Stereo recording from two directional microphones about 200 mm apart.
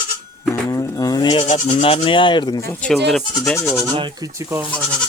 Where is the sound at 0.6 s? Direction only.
15° left (ahead or behind).